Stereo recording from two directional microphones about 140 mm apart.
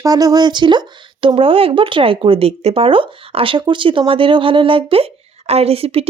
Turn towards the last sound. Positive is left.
turn(degrees=-45)  # may be behind; listen again after turning